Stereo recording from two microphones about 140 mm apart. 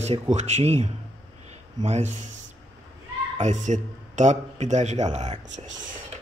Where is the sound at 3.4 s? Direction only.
60° right (ahead or behind).